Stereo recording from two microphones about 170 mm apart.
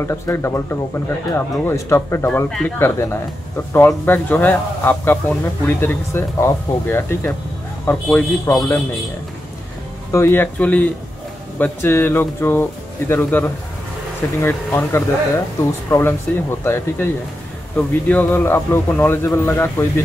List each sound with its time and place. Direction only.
0.0 s speech: 15° left (ahead or behind)
10.1 s speech: 15° left (ahead or behind)